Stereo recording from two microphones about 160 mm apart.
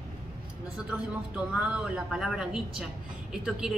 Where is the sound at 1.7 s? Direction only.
5° right (ahead or behind).